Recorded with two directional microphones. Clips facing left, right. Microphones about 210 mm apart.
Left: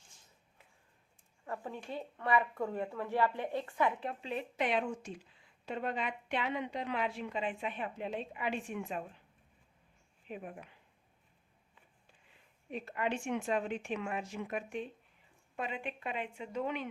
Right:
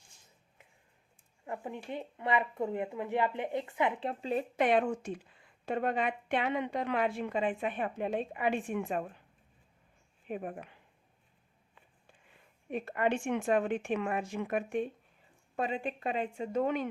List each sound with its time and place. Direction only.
1.5 s speech: 15° right (ahead or behind); by 9.0 s 50° right (ahead or behind)
10.2 s speech: 50° right (ahead or behind)
12.7 s speech: 55° right (ahead or behind)
15.5 s a woman's voice: 35° right (ahead or behind)